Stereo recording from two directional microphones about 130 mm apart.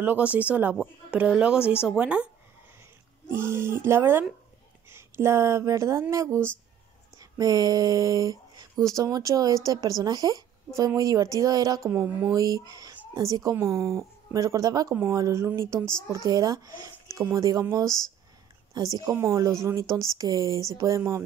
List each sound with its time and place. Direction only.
0.0 s speech: 15° right (ahead or behind)
3.3 s speech: 20° right (ahead or behind)